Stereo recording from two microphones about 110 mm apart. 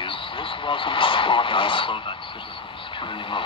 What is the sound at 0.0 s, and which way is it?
Speech, 50° left (ahead or behind).